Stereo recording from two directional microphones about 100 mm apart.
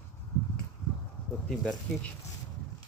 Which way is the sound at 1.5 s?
5° left (ahead or behind).